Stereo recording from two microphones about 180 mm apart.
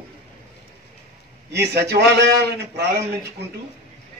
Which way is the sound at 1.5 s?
65° right (ahead or behind).